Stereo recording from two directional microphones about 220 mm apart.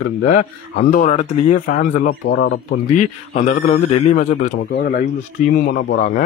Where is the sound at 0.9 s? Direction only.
30° left (ahead or behind); by 2.8 s 50° left (ahead or behind).